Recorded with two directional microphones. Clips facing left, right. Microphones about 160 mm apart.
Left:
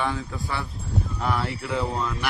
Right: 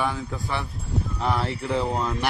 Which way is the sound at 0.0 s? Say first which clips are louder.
Right 1 dB; 15° right (ahead or behind).